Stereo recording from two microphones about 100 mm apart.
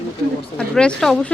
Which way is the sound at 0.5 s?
10° left (ahead or behind).